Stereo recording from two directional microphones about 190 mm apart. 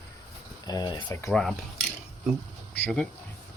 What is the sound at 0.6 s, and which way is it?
Speech, 20° left (ahead or behind).